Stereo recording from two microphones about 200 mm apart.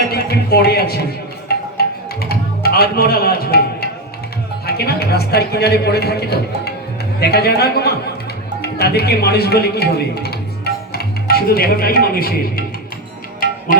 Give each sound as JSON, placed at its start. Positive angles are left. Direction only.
{"t": 0.1, "sound": "a sound", "side_deg": 50}
{"t": 1.8, "sound": "music", "side_deg": 50}
{"t": 4.6, "sound": "a man's voice", "side_deg": 50}
{"t": 13.7, "sound": "music", "side_deg": 45}